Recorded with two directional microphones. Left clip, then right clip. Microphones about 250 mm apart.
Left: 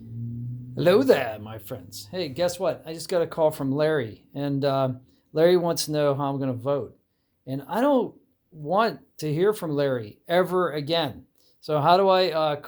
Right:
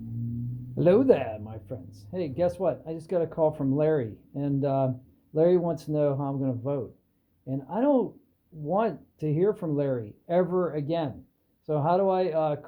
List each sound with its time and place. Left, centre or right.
0.8 s speech: centre